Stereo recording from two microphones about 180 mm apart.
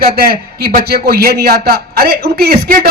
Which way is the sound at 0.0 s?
60° right (ahead or behind).